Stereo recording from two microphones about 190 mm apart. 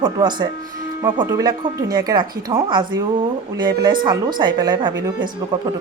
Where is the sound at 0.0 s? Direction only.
25° right (ahead or behind).